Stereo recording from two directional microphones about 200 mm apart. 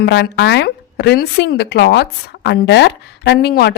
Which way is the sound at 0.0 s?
60° left (ahead or behind).